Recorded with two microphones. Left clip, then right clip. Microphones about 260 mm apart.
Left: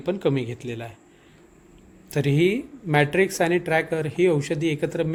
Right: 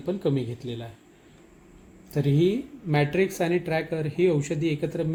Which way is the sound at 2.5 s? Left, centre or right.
Left.